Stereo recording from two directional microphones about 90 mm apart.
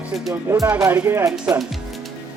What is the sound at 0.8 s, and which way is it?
Speech, 20° right (ahead or behind).